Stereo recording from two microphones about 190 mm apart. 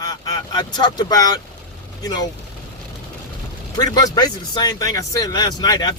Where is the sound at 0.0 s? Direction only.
20° left (ahead or behind).